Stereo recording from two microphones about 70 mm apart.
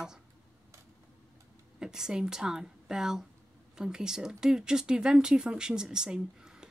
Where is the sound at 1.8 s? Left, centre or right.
Centre.